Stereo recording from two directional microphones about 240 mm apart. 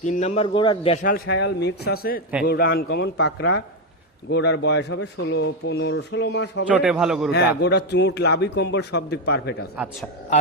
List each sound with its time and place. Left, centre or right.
0.0 s a man's voice: left
1.0 s a man's voice: left
6.7 s a man's voice: centre
7.3 s speech: left
9.7 s a man's voice: centre